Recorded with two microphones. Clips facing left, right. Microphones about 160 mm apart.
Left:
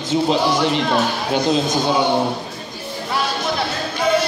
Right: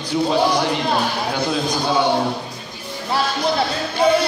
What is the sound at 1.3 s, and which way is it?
Speech, 20° left (ahead or behind).